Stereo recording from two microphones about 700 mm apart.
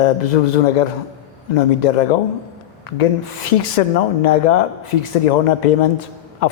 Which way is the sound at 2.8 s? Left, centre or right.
Left.